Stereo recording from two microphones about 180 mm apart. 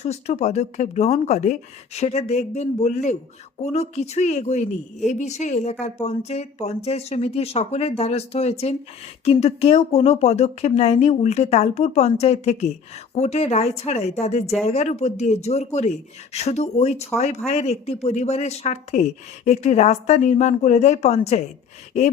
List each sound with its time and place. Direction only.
0.0 s speech: 35° left (ahead or behind)